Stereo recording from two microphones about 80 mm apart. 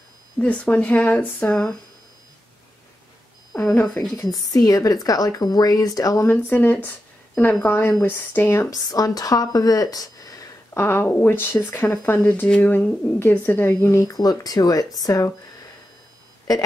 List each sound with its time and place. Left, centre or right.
0.4 s speech: centre
4.1 s a woman's voice: left
6.2 s a woman's voice: left
8.6 s speech: left
10.7 s a woman's voice: left
13.9 s a woman's voice: left